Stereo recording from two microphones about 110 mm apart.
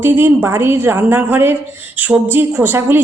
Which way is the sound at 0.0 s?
20° right (ahead or behind).